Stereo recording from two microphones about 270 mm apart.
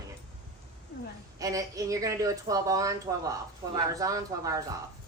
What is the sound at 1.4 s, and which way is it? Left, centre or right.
Speech, centre.